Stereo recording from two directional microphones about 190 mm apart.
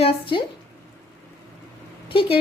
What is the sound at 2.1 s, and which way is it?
Speech, 30° left (ahead or behind).